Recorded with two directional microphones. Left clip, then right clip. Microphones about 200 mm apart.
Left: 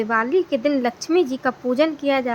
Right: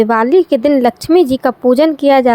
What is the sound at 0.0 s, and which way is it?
Speech, 30° right (ahead or behind).